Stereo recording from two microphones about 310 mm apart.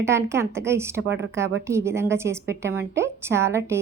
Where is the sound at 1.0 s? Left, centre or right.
Right.